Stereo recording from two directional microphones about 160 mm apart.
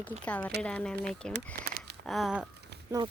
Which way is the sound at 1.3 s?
75° right (ahead or behind).